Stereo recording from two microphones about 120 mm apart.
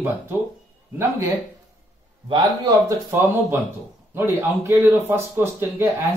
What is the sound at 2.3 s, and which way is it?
Speech, 30° right (ahead or behind).